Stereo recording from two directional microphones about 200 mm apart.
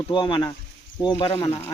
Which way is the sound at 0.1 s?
25° left (ahead or behind).